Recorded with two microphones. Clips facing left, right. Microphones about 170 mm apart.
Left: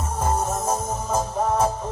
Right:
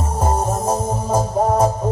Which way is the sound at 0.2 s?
35° right (ahead or behind).